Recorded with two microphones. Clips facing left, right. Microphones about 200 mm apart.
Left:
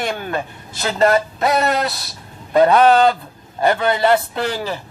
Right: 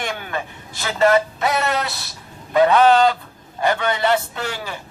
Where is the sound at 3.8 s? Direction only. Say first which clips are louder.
Left 4 dB; 40° left (ahead or behind).